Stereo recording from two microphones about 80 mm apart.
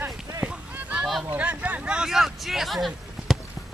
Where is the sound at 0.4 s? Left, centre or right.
Centre.